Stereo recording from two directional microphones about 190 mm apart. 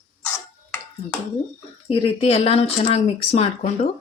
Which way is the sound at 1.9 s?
30° left (ahead or behind).